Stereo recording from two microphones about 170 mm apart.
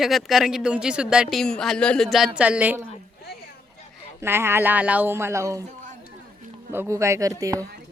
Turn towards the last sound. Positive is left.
turn(degrees=-20)  # may be behind; listen again after turning